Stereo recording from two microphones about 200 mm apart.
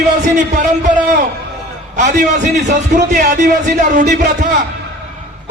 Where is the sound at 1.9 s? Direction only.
40° right (ahead or behind).